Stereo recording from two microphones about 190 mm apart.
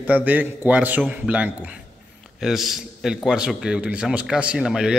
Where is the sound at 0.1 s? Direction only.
10° right (ahead or behind).